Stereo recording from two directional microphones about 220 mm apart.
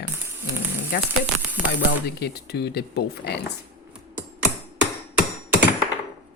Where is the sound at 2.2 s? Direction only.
45° left (ahead or behind).